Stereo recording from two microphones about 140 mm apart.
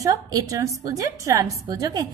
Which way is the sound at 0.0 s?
25° right (ahead or behind).